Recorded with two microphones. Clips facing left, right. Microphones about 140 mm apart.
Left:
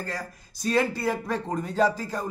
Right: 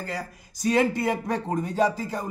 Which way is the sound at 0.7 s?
15° right (ahead or behind).